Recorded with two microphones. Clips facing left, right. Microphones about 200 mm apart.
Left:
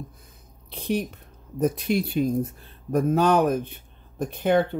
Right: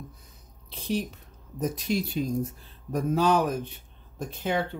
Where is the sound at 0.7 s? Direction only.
55° left (ahead or behind).